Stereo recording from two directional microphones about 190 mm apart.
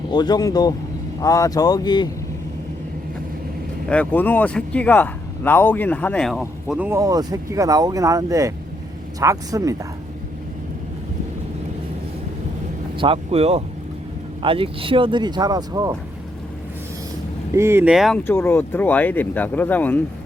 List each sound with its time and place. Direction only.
0.1 s speech: 20° left (ahead or behind)
3.8 s speech: 5° left (ahead or behind)
6.7 s speech: 10° right (ahead or behind)
13.0 s speech: 30° right (ahead or behind)
17.5 s speech: 15° right (ahead or behind)
18.2 s speech: 10° left (ahead or behind)